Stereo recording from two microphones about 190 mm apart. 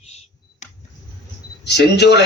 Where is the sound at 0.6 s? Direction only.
40° left (ahead or behind).